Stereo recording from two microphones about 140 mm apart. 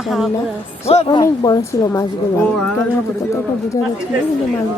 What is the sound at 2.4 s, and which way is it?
Speech, 5° left (ahead or behind).